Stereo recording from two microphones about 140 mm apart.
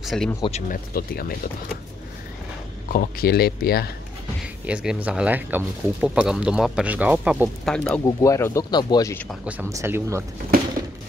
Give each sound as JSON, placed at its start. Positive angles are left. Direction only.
{"t": 0.0, "sound": "speech", "side_deg": 0}
{"t": 0.4, "sound": "speech", "side_deg": 50}
{"t": 0.7, "sound": "speech", "side_deg": 90}
{"t": 2.9, "sound": "speech", "side_deg": 90}
{"t": 4.6, "sound": "speech", "side_deg": -10}
{"t": 7.6, "sound": "speech", "side_deg": 5}
{"t": 8.0, "sound": "speech", "side_deg": 25}
{"t": 9.7, "sound": "speech", "side_deg": -20}